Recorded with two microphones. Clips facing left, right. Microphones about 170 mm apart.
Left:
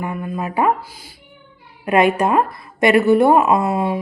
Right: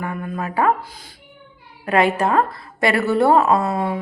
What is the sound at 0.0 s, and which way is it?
A woman's voice, 10° left (ahead or behind).